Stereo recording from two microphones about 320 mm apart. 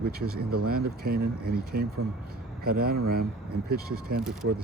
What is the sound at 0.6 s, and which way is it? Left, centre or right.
Speech, right.